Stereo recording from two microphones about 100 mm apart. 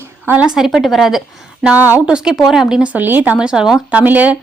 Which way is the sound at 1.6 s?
15° right (ahead or behind).